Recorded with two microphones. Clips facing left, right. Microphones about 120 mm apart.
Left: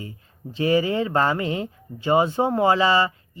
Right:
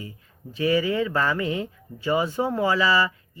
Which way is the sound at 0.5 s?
30° left (ahead or behind).